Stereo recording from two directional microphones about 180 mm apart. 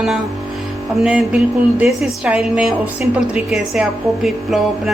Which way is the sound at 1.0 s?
5° right (ahead or behind).